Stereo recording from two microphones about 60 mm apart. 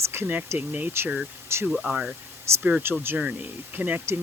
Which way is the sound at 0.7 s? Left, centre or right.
Right.